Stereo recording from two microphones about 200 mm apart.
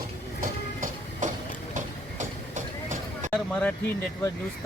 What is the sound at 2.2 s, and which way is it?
Train, 40° right (ahead or behind).